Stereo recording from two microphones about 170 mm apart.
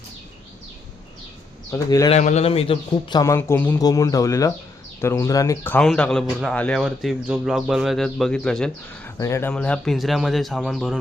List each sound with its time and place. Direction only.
1.7 s a man's voice: 20° left (ahead or behind)
2.0 s a man's voice: 40° left (ahead or behind); by 9.1 s 5° left (ahead or behind)
9.1 s speech: 15° left (ahead or behind)
9.5 s speech: 5° left (ahead or behind)